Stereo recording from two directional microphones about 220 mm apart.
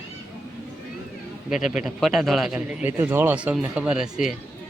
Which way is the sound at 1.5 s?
Centre (ahead or behind).